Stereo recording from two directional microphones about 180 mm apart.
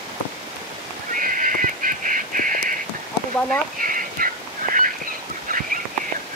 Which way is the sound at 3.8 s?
50° right (ahead or behind).